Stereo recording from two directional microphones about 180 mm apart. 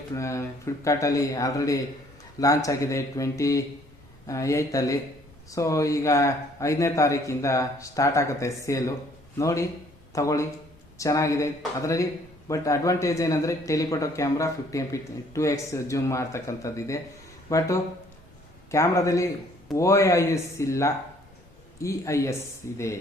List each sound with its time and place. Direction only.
0.1 s speech: 15° left (ahead or behind)
18.7 s speech: 15° left (ahead or behind)